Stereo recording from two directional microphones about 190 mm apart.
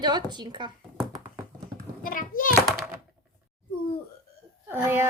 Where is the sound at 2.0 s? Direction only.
50° left (ahead or behind).